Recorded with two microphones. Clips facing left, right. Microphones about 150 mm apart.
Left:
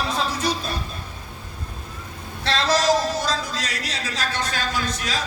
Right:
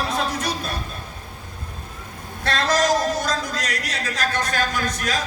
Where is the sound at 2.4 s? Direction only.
50° right (ahead or behind).